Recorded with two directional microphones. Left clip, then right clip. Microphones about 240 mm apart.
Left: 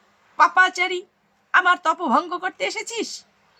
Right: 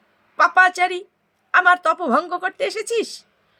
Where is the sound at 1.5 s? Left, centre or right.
Centre.